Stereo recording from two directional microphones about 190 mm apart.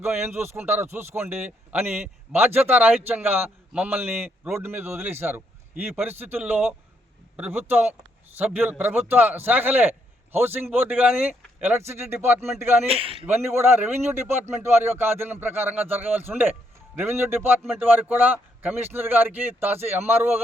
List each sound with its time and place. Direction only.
0.0 s a man's voice: 10° right (ahead or behind)
12.9 s a man's voice: 30° right (ahead or behind)
13.2 s a man's voice: 10° right (ahead or behind)